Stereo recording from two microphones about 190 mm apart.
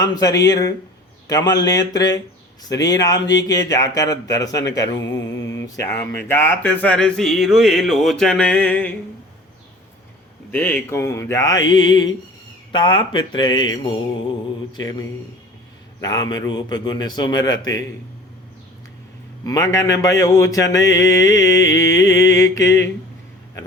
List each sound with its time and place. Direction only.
0.0 s a man's voice: 20° left (ahead or behind)
10.5 s a man's voice: 10° left (ahead or behind)
19.5 s speech: 15° left (ahead or behind)